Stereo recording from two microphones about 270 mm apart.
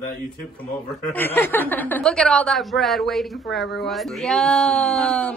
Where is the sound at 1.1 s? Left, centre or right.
Centre.